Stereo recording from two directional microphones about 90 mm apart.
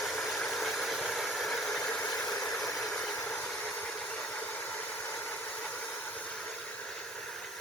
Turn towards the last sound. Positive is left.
turn(degrees=15)  # may be behind; listen again after turning